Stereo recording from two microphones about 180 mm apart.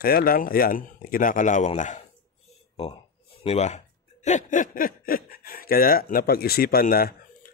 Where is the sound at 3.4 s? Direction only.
40° left (ahead or behind).